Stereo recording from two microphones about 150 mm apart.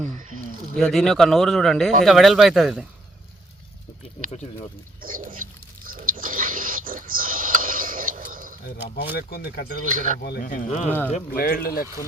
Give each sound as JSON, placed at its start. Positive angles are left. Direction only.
{"t": 0.1, "sound": "a sound", "side_deg": -60}
{"t": 0.8, "sound": "speech", "side_deg": 0}
{"t": 5.0, "sound": "a sound", "side_deg": -65}
{"t": 8.6, "sound": "speech", "side_deg": 90}
{"t": 9.9, "sound": "speech", "side_deg": -60}
{"t": 10.2, "sound": "speech", "side_deg": 75}
{"t": 11.3, "sound": "speech", "side_deg": 80}